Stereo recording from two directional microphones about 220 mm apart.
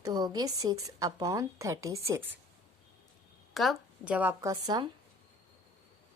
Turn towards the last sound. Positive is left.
turn(degrees=-15)  # may be behind; listen again after turning